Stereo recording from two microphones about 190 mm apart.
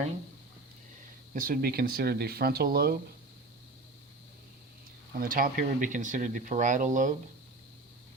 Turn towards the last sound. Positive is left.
turn(degrees=-40)  # may be behind; listen again after turning